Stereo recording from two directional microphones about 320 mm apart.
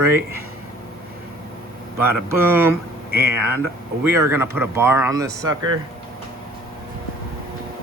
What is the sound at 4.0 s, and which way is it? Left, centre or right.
Speech, centre.